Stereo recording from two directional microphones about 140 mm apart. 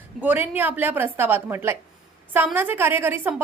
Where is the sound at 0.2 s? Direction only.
15° right (ahead or behind).